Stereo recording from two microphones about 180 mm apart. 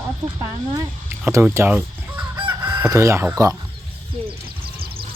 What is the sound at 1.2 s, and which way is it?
Speech, 15° right (ahead or behind).